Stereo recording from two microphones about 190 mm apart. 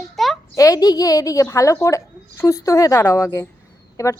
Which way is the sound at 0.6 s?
20° left (ahead or behind).